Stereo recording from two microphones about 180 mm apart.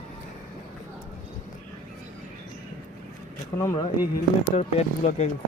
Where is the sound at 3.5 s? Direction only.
15° left (ahead or behind).